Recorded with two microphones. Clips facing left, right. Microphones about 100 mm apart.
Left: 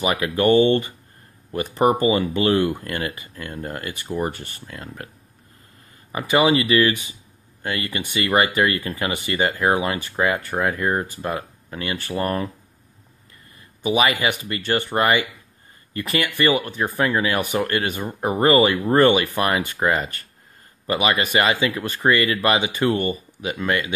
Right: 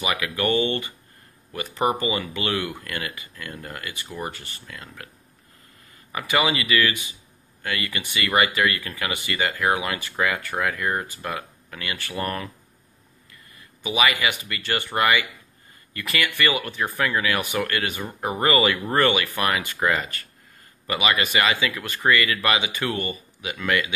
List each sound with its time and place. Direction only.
0.0 s speech: 35° left (ahead or behind)
6.1 s speech: 35° left (ahead or behind)
13.8 s speech: 35° left (ahead or behind)